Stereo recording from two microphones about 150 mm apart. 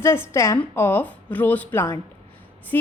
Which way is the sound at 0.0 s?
20° left (ahead or behind).